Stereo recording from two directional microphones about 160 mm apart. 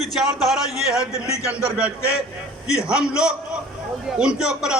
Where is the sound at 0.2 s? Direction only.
Centre (ahead or behind).